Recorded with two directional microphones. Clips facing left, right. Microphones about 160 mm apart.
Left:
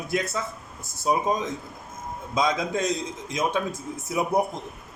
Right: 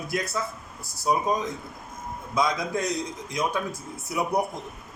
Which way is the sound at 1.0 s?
20° left (ahead or behind).